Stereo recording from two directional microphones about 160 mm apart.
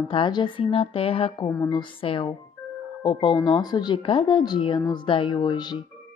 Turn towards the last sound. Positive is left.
turn(degrees=25)  # may be behind; listen again after turning